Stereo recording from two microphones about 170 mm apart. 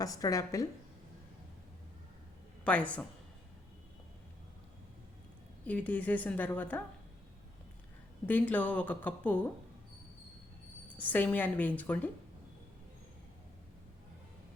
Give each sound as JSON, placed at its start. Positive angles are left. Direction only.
{"t": 0.0, "sound": "a woman's voice", "side_deg": 20}
{"t": 2.6, "sound": "a woman's voice", "side_deg": 10}
{"t": 5.6, "sound": "a woman's voice", "side_deg": 10}
{"t": 8.3, "sound": "a woman's voice", "side_deg": 10}
{"t": 11.0, "sound": "a woman's voice", "side_deg": 10}